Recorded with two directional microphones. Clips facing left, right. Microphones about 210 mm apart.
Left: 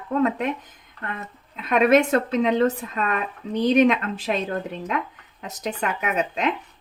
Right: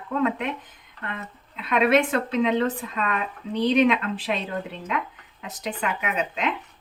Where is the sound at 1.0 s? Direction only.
45° left (ahead or behind).